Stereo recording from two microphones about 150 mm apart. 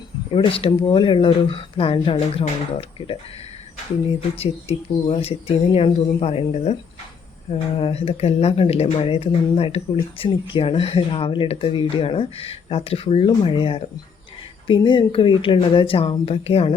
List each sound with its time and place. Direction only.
0.3 s speech: 35° left (ahead or behind)
5.0 s speech: 40° left (ahead or behind)